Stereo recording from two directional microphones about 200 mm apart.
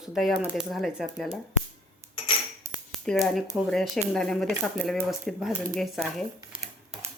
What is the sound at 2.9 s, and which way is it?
Speech, centre (ahead or behind).